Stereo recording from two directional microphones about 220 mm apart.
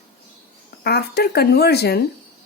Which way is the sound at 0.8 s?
45° left (ahead or behind).